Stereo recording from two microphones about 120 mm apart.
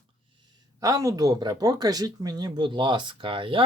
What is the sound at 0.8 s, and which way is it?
Speech, 25° right (ahead or behind).